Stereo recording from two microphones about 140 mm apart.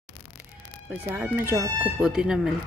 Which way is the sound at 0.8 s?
20° right (ahead or behind).